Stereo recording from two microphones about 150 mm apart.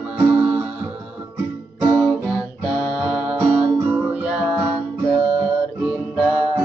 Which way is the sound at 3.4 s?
15° right (ahead or behind).